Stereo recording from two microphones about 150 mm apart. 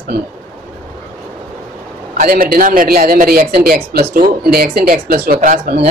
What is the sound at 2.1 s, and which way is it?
Speech, 75° right (ahead or behind).